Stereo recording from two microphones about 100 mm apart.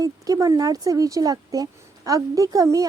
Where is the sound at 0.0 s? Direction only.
35° right (ahead or behind).